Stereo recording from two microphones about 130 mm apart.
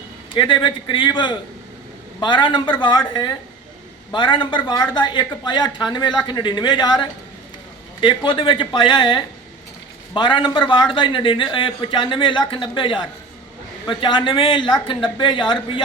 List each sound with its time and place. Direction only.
0.3 s a woman's voice: 40° left (ahead or behind)